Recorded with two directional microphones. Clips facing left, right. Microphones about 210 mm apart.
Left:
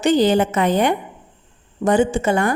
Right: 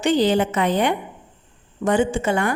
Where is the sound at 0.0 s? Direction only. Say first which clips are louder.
Left 3 dB; 45° left (ahead or behind).